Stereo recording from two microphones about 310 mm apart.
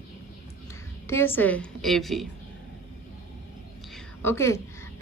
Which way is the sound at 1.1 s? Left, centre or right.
Centre.